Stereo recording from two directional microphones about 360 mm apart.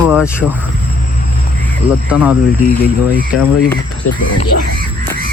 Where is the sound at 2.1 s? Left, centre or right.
Centre.